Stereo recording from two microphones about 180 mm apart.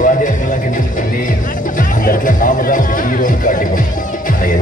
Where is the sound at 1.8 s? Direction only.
50° left (ahead or behind).